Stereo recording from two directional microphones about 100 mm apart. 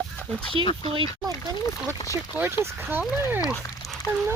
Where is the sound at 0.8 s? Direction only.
70° right (ahead or behind).